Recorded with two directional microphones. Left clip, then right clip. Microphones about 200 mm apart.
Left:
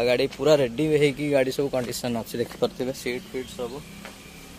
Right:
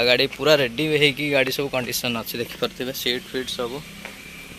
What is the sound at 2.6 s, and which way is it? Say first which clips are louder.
Speech: left 1 dB; 5° left (ahead or behind).